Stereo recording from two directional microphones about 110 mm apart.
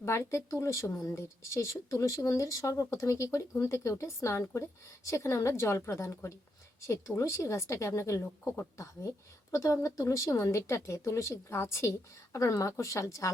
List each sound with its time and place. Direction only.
0.0 s speech: 25° left (ahead or behind)